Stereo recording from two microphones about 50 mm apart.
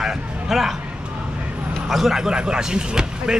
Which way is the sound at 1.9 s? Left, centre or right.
Centre.